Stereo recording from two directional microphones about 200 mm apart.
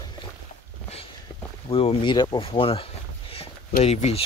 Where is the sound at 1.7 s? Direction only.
25° left (ahead or behind).